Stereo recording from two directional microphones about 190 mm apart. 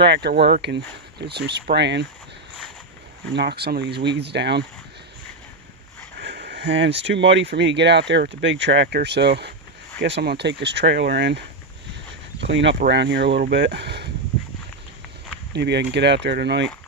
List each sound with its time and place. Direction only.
0.0 s speech: 60° right (ahead or behind)
3.3 s speech: 60° right (ahead or behind)
6.1 s speech: 60° right (ahead or behind)
15.5 s speech: 60° right (ahead or behind)